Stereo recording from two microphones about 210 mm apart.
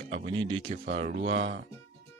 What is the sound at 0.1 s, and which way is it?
Speech, 25° right (ahead or behind).